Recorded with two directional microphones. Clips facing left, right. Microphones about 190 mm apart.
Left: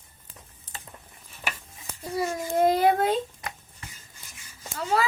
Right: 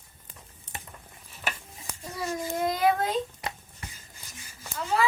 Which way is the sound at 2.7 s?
30° left (ahead or behind).